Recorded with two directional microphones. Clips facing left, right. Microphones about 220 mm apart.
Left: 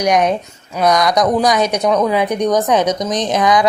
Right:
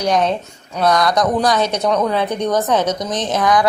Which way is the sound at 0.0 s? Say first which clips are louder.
Left 2 dB; 15° left (ahead or behind).